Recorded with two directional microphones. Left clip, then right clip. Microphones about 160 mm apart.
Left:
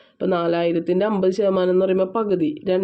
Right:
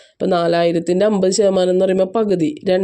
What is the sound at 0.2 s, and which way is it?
Speech, 45° right (ahead or behind).